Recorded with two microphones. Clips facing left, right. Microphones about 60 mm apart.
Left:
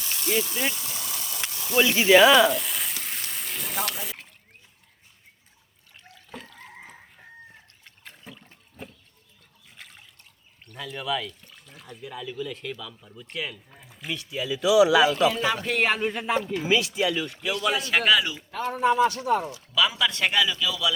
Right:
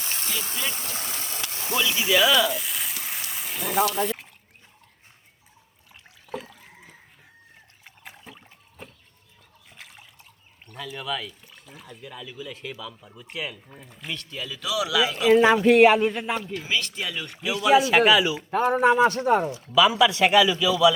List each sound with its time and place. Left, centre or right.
0.0 s vehicle: right
0.7 s frying: right
1.7 s speech: left
2.6 s frying: centre
6.1 s water: centre
7.9 s trickle: centre
8.8 s liquid: centre
9.6 s water: centre
10.7 s speech: centre
14.8 s speech: left
15.3 s speech: right
15.6 s speech: centre
18.8 s a man's voice: right
19.9 s a man's voice: centre